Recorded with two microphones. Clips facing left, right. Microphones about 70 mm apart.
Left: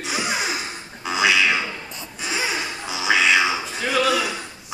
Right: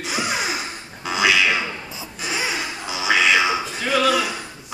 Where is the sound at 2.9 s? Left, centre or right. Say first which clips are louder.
Even; centre.